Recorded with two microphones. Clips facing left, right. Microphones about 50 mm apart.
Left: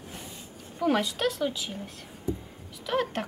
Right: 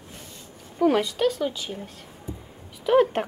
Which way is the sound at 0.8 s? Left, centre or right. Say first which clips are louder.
Right 5 dB; centre.